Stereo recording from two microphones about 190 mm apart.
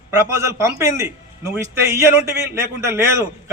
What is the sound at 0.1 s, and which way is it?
A man's voice, 15° right (ahead or behind).